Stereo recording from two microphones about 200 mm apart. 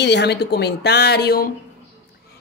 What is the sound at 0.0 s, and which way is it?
Speech, 60° left (ahead or behind).